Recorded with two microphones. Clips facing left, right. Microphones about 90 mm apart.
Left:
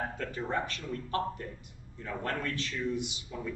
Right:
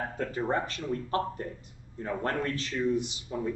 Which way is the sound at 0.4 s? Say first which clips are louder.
Right 4 dB; 25° right (ahead or behind).